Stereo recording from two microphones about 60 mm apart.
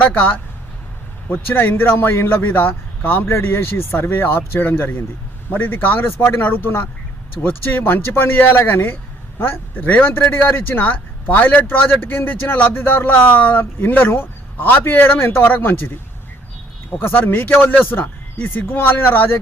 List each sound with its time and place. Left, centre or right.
0.0 s speech: left
17.0 s speech: left